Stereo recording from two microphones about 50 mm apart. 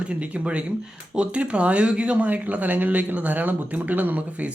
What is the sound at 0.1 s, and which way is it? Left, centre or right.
A man's voice, right.